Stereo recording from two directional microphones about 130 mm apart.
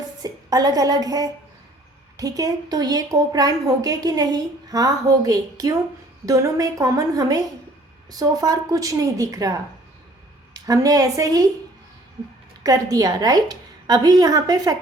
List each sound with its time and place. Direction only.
0.2 s a woman's voice: 30° right (ahead or behind)
12.6 s a woman's voice: 30° right (ahead or behind)